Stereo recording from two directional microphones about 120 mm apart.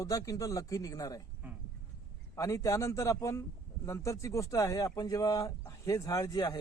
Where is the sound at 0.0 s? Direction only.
30° left (ahead or behind).